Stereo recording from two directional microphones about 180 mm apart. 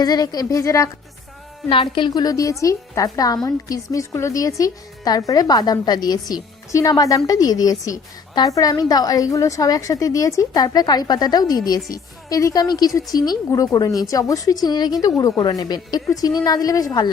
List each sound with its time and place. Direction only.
0.0 s a woman's voice: 20° left (ahead or behind)
1.7 s a woman's voice: 30° left (ahead or behind)